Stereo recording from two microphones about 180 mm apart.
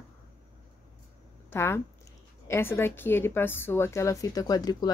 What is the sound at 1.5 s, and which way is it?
Speech, 15° left (ahead or behind).